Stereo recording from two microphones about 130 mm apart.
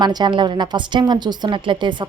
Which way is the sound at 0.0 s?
35° right (ahead or behind).